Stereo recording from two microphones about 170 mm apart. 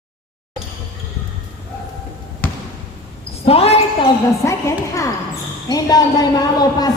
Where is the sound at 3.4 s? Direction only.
35° left (ahead or behind).